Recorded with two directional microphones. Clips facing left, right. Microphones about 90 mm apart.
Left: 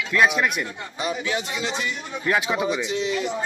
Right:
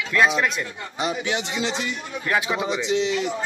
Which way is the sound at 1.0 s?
25° right (ahead or behind).